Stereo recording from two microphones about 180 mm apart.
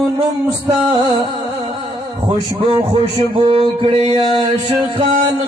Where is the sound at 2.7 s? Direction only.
30° right (ahead or behind).